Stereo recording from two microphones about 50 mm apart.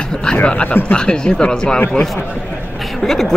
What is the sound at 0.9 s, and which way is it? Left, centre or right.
Speech, centre.